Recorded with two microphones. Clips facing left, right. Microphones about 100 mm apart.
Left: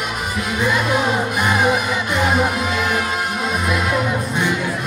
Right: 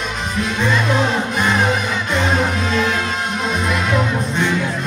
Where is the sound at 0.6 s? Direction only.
10° left (ahead or behind).